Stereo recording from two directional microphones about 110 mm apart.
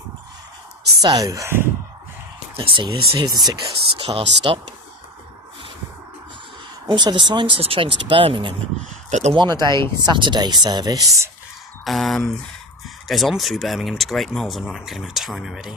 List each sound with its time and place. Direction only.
1.0 s speech: 35° right (ahead or behind)
2.6 s speech: 50° right (ahead or behind)
4.0 s speech: 55° right (ahead or behind)
6.8 s speech: 45° right (ahead or behind)
9.0 s speech: 90° right
9.3 s speech: 40° right (ahead or behind)
11.9 s speech: centre (ahead or behind)